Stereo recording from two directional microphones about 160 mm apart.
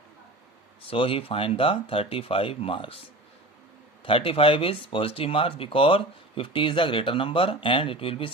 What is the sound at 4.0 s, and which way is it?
Speech, 35° left (ahead or behind).